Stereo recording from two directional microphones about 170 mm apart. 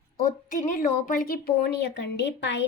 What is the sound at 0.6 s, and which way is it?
Speech, 50° left (ahead or behind).